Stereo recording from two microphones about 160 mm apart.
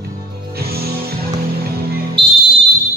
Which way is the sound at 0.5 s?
75° right (ahead or behind).